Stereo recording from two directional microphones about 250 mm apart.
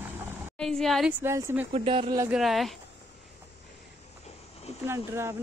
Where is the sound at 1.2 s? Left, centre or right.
Centre.